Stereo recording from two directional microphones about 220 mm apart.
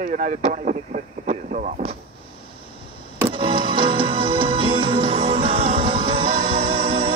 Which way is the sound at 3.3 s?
25° right (ahead or behind).